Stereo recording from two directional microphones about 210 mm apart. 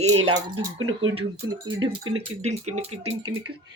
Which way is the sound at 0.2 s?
25° right (ahead or behind).